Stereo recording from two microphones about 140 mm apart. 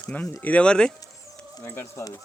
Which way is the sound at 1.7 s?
15° left (ahead or behind).